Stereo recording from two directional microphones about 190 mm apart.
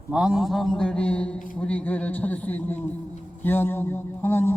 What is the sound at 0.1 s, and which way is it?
A man's voice, 5° right (ahead or behind).